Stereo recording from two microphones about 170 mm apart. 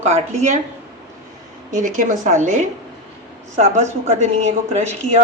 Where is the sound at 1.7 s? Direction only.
50° right (ahead or behind).